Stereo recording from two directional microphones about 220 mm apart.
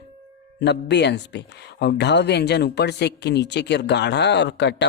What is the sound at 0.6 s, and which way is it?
Speech, 50° left (ahead or behind).